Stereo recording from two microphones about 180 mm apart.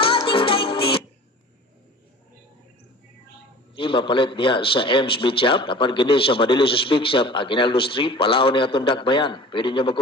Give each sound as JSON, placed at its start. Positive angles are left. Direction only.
{"t": 0.0, "sound": "music", "side_deg": 30}
{"t": 3.8, "sound": "a man's voice", "side_deg": 30}